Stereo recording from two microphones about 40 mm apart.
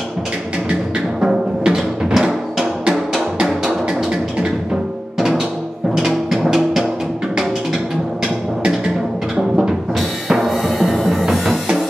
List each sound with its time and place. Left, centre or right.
1.2 s music: centre
5.9 s music: centre
9.4 s music: centre